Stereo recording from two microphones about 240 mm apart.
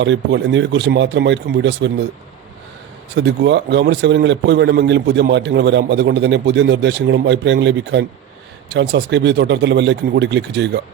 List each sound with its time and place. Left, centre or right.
0.0 s a man's voice: right
3.2 s a man's voice: right